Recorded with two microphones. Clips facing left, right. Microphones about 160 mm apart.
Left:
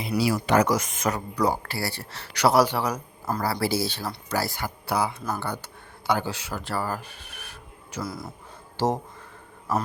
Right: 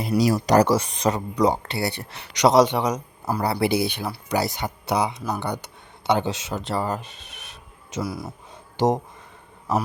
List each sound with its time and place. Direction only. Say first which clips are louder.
0.1 s speech: right 4 dB; 25° right (ahead or behind)
0.4 s speech: right 4 dB; 40° right (ahead or behind); by 8.9 s 15° right (ahead or behind)